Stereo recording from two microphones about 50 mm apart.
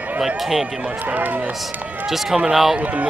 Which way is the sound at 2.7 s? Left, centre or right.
Right.